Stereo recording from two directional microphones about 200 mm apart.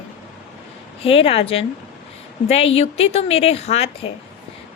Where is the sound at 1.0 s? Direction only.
30° left (ahead or behind).